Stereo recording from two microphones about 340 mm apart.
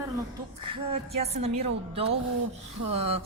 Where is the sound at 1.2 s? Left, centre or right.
Centre.